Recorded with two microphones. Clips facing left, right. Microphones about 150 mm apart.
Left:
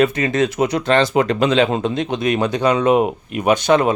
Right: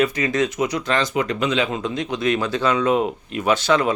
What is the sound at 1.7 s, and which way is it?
Speech, 30° left (ahead or behind).